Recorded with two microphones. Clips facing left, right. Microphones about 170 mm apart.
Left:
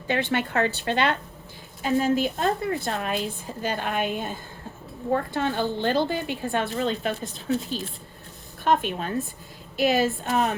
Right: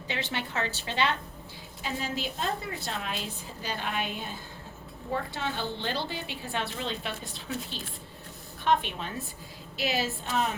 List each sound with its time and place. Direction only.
0.1 s a woman's voice: 55° left (ahead or behind)
8.6 s a woman's voice: 45° left (ahead or behind)